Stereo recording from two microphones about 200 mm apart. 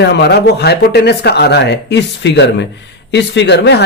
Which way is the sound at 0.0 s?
60° left (ahead or behind).